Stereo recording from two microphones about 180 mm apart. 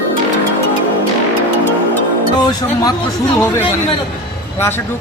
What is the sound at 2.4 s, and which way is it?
Speech, 25° left (ahead or behind).